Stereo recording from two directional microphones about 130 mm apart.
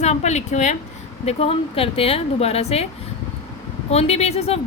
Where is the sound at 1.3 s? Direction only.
50° left (ahead or behind).